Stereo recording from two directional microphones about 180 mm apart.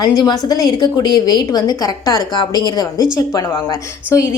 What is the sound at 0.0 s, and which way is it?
A woman's voice, 20° left (ahead or behind).